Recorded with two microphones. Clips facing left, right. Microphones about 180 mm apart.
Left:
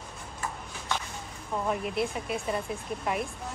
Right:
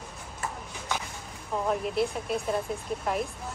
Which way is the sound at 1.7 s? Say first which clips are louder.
Right 2 dB; centre (ahead or behind).